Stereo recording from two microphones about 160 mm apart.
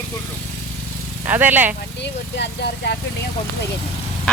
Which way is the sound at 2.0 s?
90° left.